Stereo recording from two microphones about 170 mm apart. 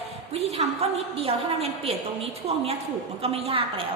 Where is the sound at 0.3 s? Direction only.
40° right (ahead or behind).